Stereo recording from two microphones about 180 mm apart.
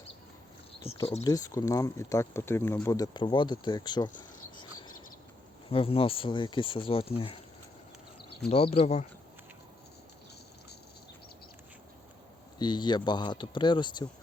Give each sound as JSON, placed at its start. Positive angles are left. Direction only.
{"t": 1.2, "sound": "speech", "side_deg": 20}
{"t": 5.6, "sound": "speech", "side_deg": 30}
{"t": 8.4, "sound": "speech", "side_deg": 35}
{"t": 12.5, "sound": "speech", "side_deg": 25}